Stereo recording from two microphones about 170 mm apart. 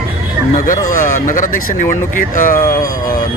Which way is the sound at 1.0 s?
50° left (ahead or behind).